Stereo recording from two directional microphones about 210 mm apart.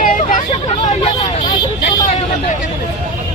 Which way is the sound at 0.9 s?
25° left (ahead or behind).